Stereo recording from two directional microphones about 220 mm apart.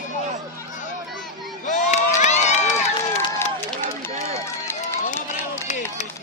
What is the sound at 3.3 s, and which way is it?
Run, 10° left (ahead or behind).